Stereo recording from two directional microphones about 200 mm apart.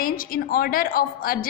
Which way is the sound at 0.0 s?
45° left (ahead or behind).